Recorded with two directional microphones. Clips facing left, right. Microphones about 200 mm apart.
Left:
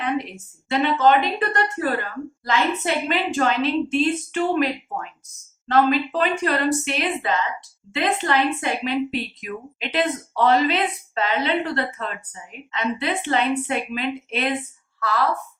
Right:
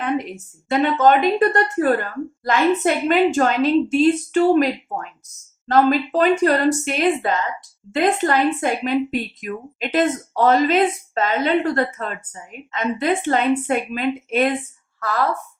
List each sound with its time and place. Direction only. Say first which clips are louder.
0.0 s a woman's voice: right 2 dB; 45° right (ahead or behind)